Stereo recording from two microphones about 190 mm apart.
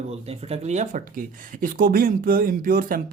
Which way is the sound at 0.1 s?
30° right (ahead or behind).